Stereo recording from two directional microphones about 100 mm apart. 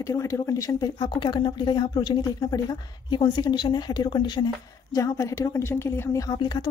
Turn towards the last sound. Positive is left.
turn(degrees=45)  # may be behind; listen again after turning